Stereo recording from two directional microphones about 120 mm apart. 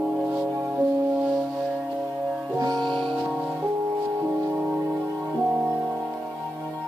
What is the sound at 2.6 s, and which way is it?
Music, 35° right (ahead or behind).